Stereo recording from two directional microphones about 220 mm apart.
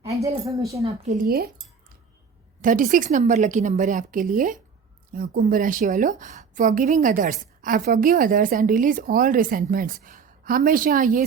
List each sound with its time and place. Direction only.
0.0 s speech: 15° right (ahead or behind)
0.9 s a woman's voice: 35° right (ahead or behind)
2.6 s a woman's voice: 40° right (ahead or behind)